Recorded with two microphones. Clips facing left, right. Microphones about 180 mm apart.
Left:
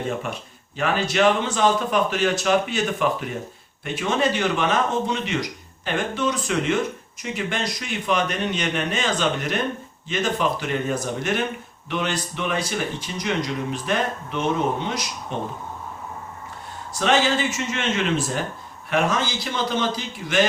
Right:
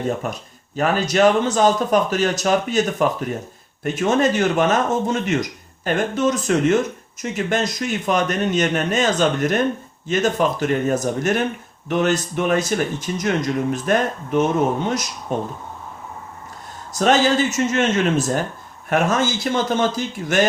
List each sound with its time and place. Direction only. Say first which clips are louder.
0.8 s speech: right 4 dB; 40° right (ahead or behind)
16.9 s speech: right 4 dB; 40° right (ahead or behind)